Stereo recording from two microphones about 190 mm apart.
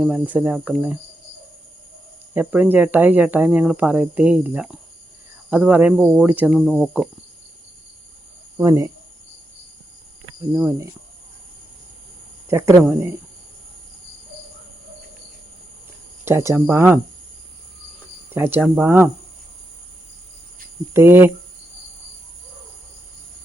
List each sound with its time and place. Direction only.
0.0 s speech: 5° right (ahead or behind)
2.3 s speech: 5° right (ahead or behind)
8.5 s speech: 15° right (ahead or behind)
10.5 s speech: 15° right (ahead or behind)
12.5 s speech: 15° right (ahead or behind)
16.2 s speech: 15° right (ahead or behind)
18.3 s speech: 10° right (ahead or behind)
20.9 s speech: 10° right (ahead or behind)